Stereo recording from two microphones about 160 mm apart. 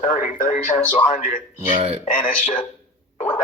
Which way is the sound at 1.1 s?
55° left (ahead or behind).